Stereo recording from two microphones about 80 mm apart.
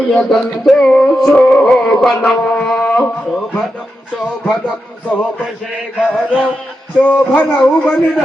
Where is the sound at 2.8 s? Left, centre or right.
Centre.